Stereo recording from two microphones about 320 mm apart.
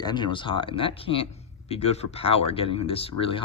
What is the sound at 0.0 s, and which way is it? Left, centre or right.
Speech, centre.